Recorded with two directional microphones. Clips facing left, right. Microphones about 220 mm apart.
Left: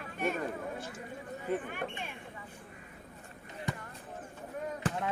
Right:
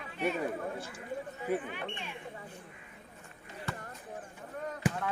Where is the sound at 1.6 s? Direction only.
50° left (ahead or behind).